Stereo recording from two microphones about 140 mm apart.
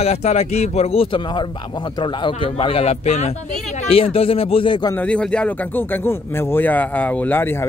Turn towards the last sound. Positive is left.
turn(degrees=15)  # may be behind; listen again after turning